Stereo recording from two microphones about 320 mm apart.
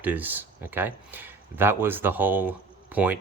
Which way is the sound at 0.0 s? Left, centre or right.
Centre.